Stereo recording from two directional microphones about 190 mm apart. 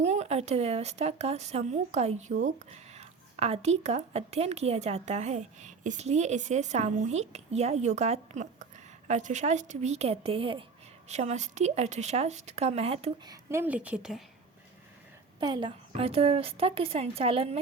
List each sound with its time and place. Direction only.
0.0 s speech: 35° right (ahead or behind)
13.3 s a woman's voice: 15° right (ahead or behind)
15.4 s speech: 25° right (ahead or behind)